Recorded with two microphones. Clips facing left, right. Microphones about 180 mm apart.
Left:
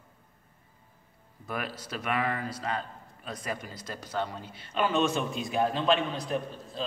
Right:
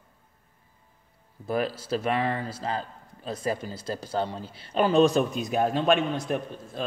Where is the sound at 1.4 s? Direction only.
30° right (ahead or behind).